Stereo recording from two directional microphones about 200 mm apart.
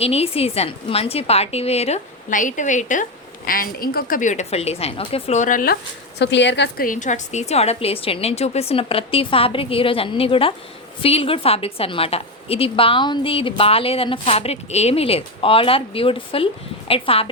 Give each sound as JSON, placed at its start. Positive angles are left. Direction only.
{"t": 0.0, "sound": "a woman's voice", "side_deg": 30}
{"t": 6.1, "sound": "a woman's voice", "side_deg": 60}
{"t": 6.8, "sound": "a woman's voice", "side_deg": 40}